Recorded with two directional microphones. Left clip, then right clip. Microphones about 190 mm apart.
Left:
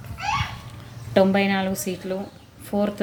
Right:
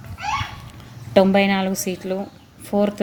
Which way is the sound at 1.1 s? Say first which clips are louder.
Right 3 dB; 30° right (ahead or behind).